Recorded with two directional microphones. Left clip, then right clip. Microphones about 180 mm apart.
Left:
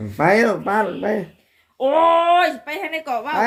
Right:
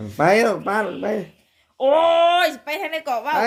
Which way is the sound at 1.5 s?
25° right (ahead or behind).